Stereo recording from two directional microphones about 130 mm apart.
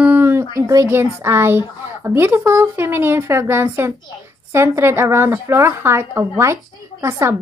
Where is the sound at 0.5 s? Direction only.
25° right (ahead or behind).